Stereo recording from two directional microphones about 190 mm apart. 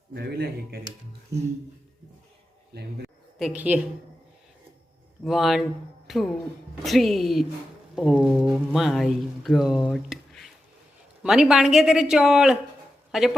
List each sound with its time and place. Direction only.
0.1 s speech: 60° right (ahead or behind)
2.7 s speech: 60° right (ahead or behind)
3.3 s a woman's voice: 5° right (ahead or behind)
5.2 s speech: centre (ahead or behind)
13.1 s a sound: centre (ahead or behind)